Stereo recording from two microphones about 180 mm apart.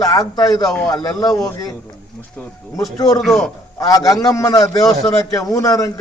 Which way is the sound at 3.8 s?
20° left (ahead or behind).